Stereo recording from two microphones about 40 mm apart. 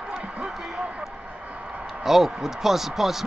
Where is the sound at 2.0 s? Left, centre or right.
Centre.